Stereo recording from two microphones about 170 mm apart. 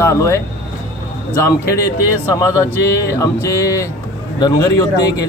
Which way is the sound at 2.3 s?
20° left (ahead or behind).